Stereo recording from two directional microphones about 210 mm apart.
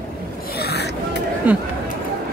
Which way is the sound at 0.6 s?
50° left (ahead or behind).